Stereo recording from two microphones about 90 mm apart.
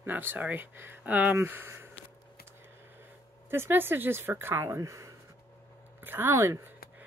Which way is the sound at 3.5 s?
25° right (ahead or behind).